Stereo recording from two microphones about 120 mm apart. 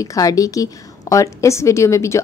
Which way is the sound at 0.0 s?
30° left (ahead or behind).